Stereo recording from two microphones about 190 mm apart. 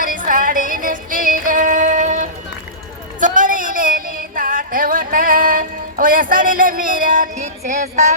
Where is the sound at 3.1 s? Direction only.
45° right (ahead or behind).